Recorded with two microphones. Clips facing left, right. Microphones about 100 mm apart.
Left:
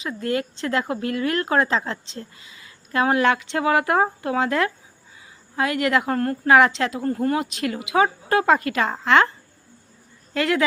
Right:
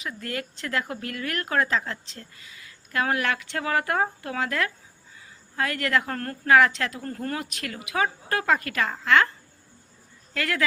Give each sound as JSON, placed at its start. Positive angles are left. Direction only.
{"t": 0.0, "sound": "speech", "side_deg": 25}
{"t": 10.3, "sound": "speech", "side_deg": 20}